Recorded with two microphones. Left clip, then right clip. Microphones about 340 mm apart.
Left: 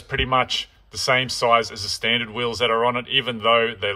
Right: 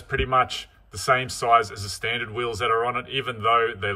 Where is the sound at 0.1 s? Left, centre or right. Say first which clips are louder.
Left 1 dB; centre.